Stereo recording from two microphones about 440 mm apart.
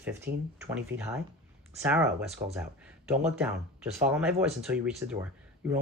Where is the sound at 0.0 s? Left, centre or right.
Centre.